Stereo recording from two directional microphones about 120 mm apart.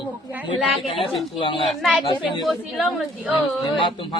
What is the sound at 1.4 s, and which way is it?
A man's voice, 45° left (ahead or behind).